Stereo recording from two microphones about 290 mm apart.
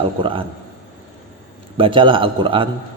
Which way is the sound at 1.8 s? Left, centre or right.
Centre.